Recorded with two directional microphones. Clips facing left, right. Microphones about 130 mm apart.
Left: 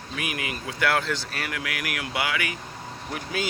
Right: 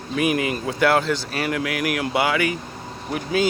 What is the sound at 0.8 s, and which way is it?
Speech, 20° right (ahead or behind).